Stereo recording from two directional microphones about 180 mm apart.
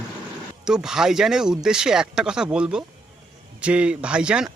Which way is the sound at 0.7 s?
5° right (ahead or behind).